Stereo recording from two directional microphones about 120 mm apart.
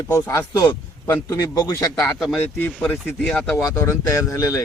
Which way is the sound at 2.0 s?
Centre (ahead or behind).